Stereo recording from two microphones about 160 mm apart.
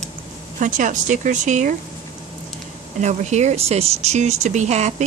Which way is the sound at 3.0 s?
45° right (ahead or behind).